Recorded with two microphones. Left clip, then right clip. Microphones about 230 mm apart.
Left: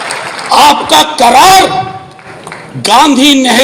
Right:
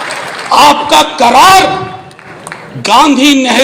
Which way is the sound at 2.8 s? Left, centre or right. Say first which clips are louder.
Left 1 dB; left.